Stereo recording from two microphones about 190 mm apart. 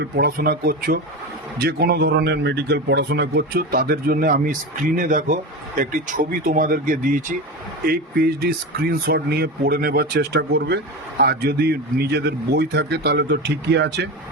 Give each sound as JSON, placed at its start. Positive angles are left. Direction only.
{"t": 0.0, "sound": "a man's voice", "side_deg": -55}